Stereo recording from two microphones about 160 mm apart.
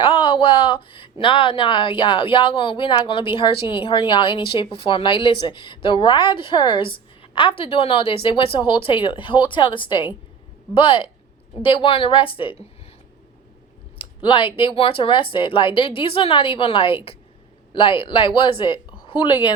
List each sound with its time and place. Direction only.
0.0 s a sound: 35° left (ahead or behind)
1.2 s a woman's voice: 35° left (ahead or behind)
14.0 s a woman's voice: 30° left (ahead or behind)